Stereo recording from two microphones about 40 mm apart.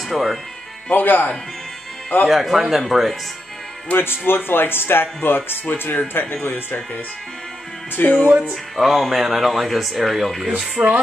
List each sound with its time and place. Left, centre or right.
0.1 s speech: centre
0.8 s speech: left
2.2 s speech: centre
3.9 s speech: left
4.3 s speech: left
7.9 s speech: left
8.7 s speech: centre
10.8 s speech: right